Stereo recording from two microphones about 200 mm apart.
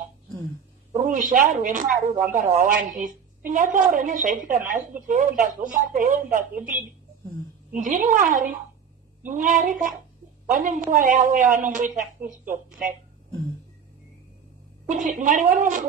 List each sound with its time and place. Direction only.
0.9 s a woman's voice: 40° right (ahead or behind)
7.7 s a woman's voice: 40° right (ahead or behind)
14.9 s a woman's voice: 40° right (ahead or behind)